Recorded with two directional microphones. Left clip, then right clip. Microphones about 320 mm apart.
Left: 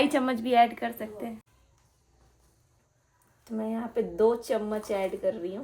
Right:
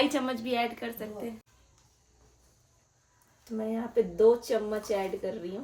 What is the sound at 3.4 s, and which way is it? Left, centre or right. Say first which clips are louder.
Speech: even; centre.